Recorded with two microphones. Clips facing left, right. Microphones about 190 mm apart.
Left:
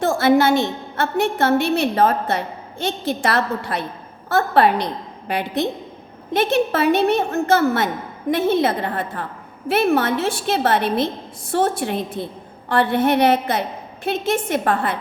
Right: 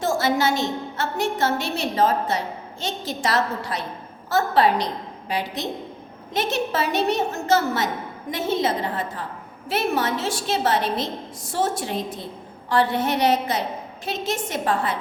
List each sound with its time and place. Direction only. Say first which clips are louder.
0.0 s a woman's voice: left 6 dB; 60° left (ahead or behind)